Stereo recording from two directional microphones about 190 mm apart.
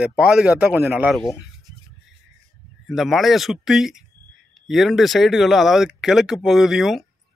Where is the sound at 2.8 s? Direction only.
Centre (ahead or behind).